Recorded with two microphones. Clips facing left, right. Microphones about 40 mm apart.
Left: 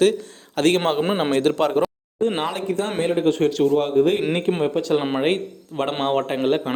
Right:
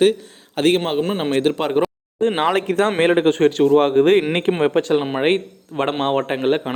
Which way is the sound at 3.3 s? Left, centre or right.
Right.